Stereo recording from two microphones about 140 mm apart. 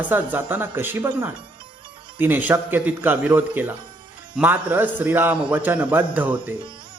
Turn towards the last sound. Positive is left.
turn(degrees=-10)  # may be behind; listen again after turning